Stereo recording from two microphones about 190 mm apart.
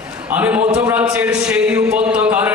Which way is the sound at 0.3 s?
10° right (ahead or behind).